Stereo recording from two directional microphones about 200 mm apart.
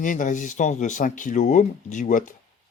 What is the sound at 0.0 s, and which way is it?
Speech, 40° left (ahead or behind).